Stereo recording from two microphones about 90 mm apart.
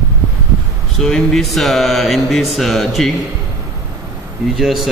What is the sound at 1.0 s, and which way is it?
Mantra, 5° left (ahead or behind).